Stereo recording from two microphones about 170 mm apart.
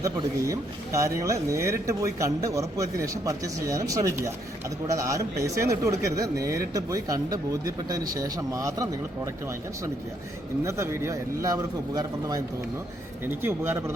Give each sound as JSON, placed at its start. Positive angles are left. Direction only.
{"t": 0.0, "sound": "a man's voice", "side_deg": -20}